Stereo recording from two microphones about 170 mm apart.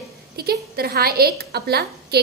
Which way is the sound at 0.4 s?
65° right (ahead or behind).